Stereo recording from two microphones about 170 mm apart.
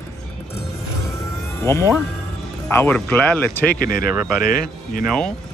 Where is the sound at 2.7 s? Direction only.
15° left (ahead or behind).